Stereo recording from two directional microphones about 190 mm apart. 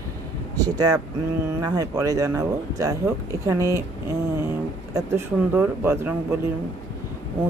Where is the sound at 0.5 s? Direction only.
20° right (ahead or behind).